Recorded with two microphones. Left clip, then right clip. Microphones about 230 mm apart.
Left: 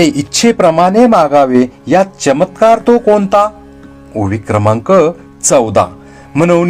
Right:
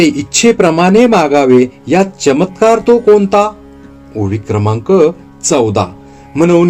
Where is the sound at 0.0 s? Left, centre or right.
Left.